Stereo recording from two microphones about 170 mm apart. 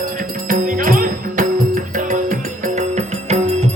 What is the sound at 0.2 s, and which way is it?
Music, 50° right (ahead or behind).